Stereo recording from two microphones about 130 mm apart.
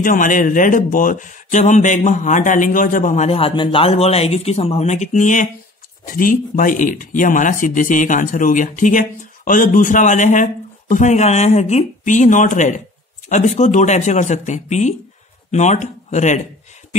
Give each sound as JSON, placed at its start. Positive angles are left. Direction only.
{"t": 0.0, "sound": "speech", "side_deg": 90}
{"t": 3.3, "sound": "speech", "side_deg": 45}
{"t": 6.0, "sound": "speech", "side_deg": 90}